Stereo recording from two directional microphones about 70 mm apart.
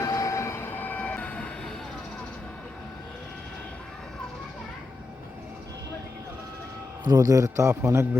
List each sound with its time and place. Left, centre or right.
0.0 s train: left; by 1.5 s centre
7.1 s a man's voice: right